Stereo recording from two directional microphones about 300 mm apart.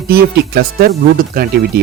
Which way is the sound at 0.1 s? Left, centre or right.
Right.